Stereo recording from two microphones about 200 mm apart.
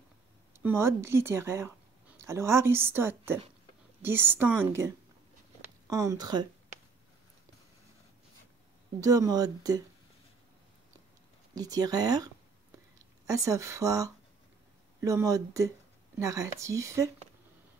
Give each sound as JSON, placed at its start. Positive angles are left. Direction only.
{"t": 0.5, "sound": "speech", "side_deg": -10}
{"t": 9.0, "sound": "speech", "side_deg": -15}
{"t": 11.5, "sound": "speech", "side_deg": -20}
{"t": 13.3, "sound": "speech", "side_deg": -15}